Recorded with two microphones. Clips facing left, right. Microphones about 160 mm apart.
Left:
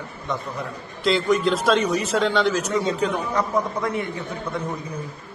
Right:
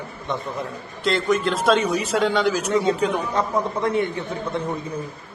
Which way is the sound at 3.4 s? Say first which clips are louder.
Even; 25° right (ahead or behind).